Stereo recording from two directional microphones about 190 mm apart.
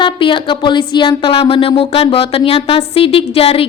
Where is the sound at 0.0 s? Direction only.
25° left (ahead or behind).